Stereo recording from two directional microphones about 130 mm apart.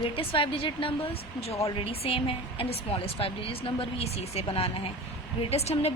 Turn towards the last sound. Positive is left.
turn(degrees=55)  # may be behind; listen again after turning